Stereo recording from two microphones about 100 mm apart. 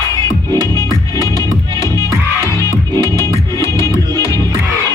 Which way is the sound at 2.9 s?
30° left (ahead or behind).